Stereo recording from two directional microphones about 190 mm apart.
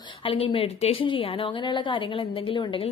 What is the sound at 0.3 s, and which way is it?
A woman's voice, 30° left (ahead or behind).